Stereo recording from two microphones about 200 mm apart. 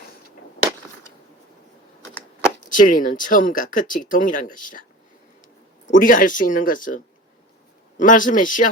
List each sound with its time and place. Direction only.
2.6 s speech: 40° left (ahead or behind)
5.9 s speech: 40° left (ahead or behind)